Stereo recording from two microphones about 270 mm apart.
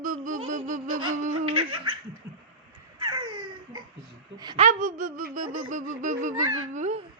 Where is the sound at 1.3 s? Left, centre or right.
Right.